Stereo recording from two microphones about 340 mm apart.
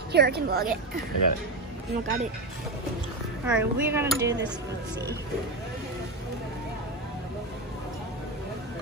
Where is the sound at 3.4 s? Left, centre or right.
Centre.